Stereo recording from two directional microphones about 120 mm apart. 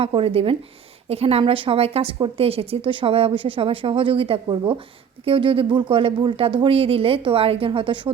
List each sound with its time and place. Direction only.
0.0 s a woman's voice: 50° right (ahead or behind)